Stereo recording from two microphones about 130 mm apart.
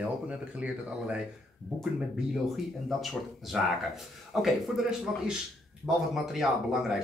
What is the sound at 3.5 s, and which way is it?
Speech, 5° right (ahead or behind).